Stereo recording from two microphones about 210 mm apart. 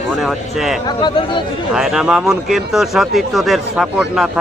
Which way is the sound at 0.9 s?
20° left (ahead or behind).